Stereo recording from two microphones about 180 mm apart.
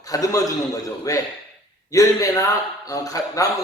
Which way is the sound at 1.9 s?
20° left (ahead or behind).